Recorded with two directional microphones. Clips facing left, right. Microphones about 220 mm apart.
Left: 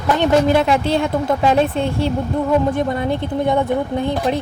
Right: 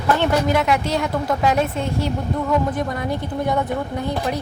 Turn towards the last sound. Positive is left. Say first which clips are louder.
# left 4 dB
turn(degrees=25)  # may be behind; listen again after turning